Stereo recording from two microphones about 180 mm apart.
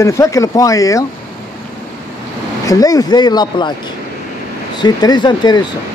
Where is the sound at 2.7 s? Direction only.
20° left (ahead or behind).